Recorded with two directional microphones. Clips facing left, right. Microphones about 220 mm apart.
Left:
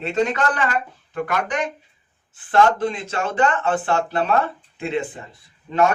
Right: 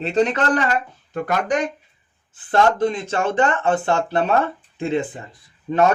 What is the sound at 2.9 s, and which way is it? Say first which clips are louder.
Speech: right 3 dB; 30° right (ahead or behind).